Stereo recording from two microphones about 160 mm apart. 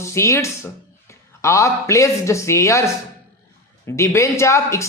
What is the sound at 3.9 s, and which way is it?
Speech, 15° left (ahead or behind).